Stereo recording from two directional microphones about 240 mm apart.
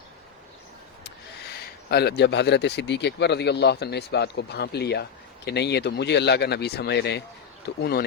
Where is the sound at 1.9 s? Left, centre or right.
Left.